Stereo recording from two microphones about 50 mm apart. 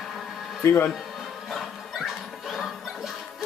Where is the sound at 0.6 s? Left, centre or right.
Left.